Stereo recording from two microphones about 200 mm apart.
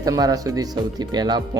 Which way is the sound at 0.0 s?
20° right (ahead or behind).